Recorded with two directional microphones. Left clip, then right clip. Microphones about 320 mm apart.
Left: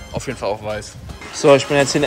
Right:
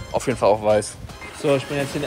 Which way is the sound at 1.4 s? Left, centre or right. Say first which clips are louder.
Left 9 dB; left.